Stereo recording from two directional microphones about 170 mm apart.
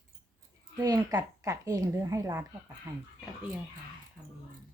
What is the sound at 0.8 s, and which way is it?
Speech, 20° right (ahead or behind).